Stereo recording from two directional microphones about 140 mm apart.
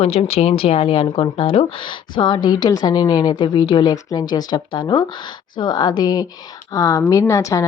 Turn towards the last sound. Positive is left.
turn(degrees=20)  # may be behind; listen again after turning